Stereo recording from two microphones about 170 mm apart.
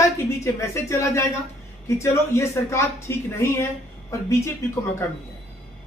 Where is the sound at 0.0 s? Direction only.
15° left (ahead or behind).